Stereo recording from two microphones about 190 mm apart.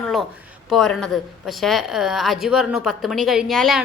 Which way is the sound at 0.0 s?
Centre (ahead or behind).